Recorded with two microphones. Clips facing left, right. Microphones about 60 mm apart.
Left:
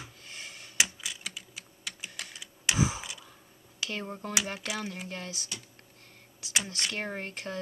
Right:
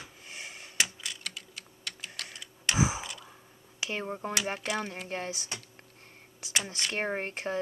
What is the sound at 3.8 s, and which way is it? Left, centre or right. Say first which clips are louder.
Speech: right 2 dB; centre.